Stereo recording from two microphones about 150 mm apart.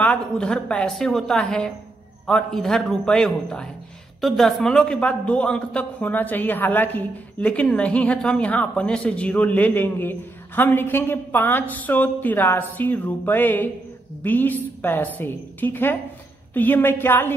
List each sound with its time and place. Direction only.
0.0 s a woman's voice: 5° left (ahead or behind)